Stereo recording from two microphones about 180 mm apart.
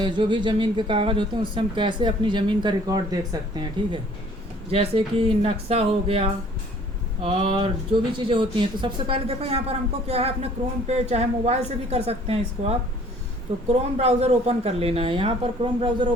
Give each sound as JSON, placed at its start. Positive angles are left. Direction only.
{"t": 0.0, "sound": "speech", "side_deg": -25}
{"t": 4.7, "sound": "speech", "side_deg": -30}
{"t": 13.7, "sound": "speech", "side_deg": -35}